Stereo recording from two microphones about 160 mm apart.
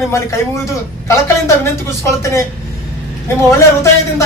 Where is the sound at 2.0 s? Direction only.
20° left (ahead or behind).